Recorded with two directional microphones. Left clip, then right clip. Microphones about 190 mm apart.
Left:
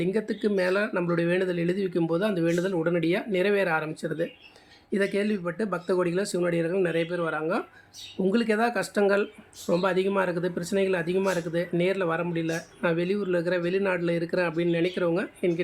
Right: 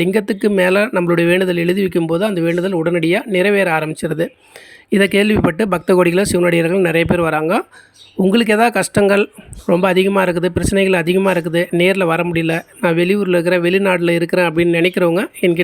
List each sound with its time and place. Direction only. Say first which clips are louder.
0.0 s speech: right 11 dB; 45° right (ahead or behind)